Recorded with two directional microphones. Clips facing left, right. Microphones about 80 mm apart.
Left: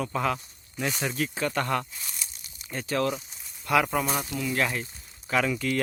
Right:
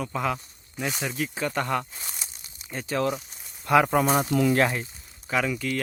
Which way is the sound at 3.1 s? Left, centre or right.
Centre.